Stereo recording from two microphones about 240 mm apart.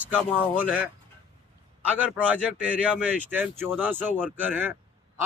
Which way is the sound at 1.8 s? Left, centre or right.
Centre.